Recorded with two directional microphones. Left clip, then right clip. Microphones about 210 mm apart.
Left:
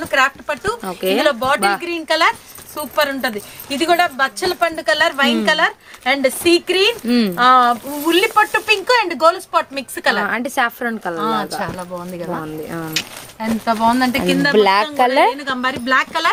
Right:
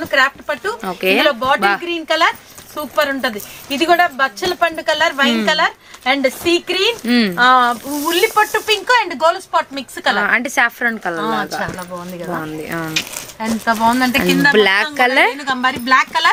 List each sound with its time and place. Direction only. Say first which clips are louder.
0.0 s speech: right 1 dB; centre (ahead or behind); by 6.9 s 15° left (ahead or behind)
7.1 s speech: right 2 dB; centre (ahead or behind)
7.3 s speech: left 1 dB; 20° left (ahead or behind)
10.2 s speech: right 4 dB; centre (ahead or behind)
11.6 s speech: right 1 dB; 20° left (ahead or behind)
12.4 s speech: right 3 dB; 5° right (ahead or behind)
12.9 s speech: right 2 dB; 15° left (ahead or behind)
13.7 s speech: right 1 dB; 5° right (ahead or behind)
14.5 s speech: even; centre (ahead or behind)
15.4 s a woman's voice: right 3 dB; 20° right (ahead or behind)